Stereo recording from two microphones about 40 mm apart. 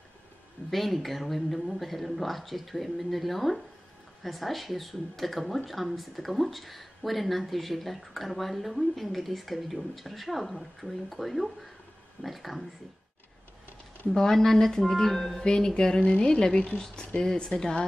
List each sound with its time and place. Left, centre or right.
0.7 s speech: centre
14.1 s speech: centre; by 16.8 s left
17.2 s speech: centre